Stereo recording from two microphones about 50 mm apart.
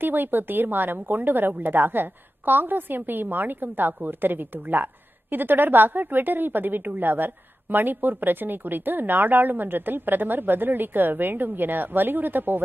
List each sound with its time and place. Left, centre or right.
0.0 s a woman's voice: right